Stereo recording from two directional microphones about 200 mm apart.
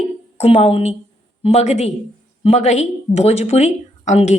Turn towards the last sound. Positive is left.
turn(degrees=35)  # may be behind; listen again after turning